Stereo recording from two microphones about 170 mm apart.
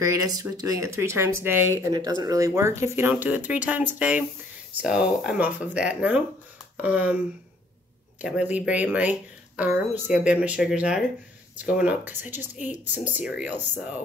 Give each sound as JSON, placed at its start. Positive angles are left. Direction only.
{"t": 0.0, "sound": "speech", "side_deg": -20}
{"t": 8.2, "sound": "speech", "side_deg": -5}